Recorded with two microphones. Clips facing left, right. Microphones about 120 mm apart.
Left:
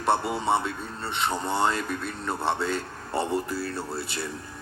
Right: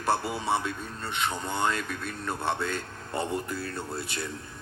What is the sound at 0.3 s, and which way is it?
Speech, 25° left (ahead or behind).